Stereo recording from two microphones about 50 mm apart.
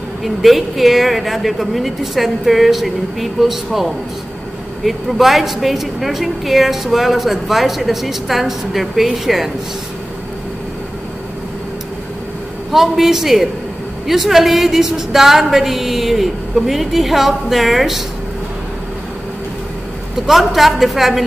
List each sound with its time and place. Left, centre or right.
0.2 s a woman's voice: centre
12.7 s a woman's voice: centre
20.2 s a woman's voice: centre